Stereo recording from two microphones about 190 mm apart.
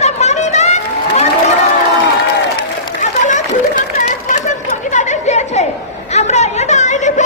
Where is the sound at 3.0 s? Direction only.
40° left (ahead or behind).